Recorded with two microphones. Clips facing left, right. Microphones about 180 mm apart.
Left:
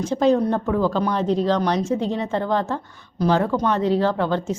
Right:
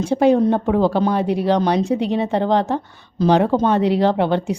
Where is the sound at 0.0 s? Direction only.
10° right (ahead or behind).